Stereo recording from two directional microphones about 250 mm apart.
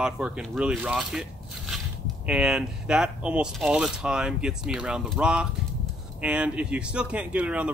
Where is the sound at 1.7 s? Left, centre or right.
Centre.